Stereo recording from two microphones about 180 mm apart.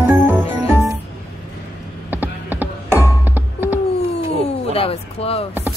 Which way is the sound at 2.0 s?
10° right (ahead or behind).